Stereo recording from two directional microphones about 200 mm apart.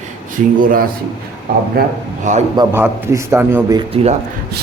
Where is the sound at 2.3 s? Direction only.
40° right (ahead or behind).